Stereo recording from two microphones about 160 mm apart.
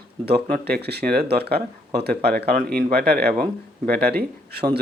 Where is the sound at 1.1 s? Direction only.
80° right.